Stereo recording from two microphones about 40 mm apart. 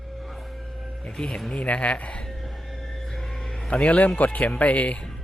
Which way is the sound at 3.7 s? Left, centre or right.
Left.